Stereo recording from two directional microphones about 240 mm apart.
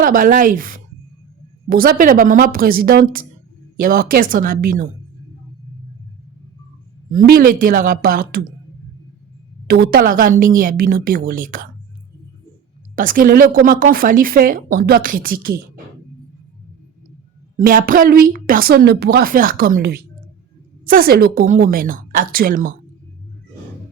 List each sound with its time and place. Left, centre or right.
0.0 s a woman's voice: right
7.1 s a woman's voice: right
9.6 s a woman's voice: right
13.0 s a woman's voice: right
17.6 s a woman's voice: right